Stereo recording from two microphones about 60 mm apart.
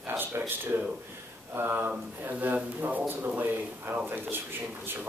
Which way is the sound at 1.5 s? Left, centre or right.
Right.